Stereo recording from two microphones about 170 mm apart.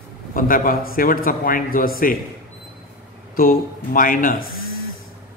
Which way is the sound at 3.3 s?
55° left (ahead or behind).